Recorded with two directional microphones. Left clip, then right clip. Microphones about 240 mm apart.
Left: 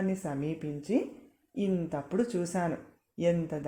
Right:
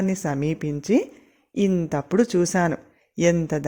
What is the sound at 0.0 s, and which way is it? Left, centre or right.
Speech, right.